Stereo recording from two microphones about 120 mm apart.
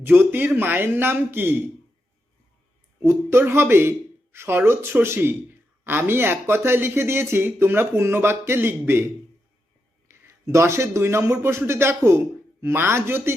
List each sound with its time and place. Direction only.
0.0 s a man's voice: 15° right (ahead or behind)
3.0 s speech: 20° right (ahead or behind)
10.1 s a man's voice: 25° right (ahead or behind)